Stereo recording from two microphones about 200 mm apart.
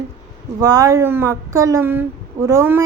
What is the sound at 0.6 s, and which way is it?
Speech, 15° right (ahead or behind).